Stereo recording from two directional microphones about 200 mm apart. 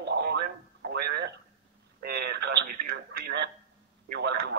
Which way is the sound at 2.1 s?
50° right (ahead or behind).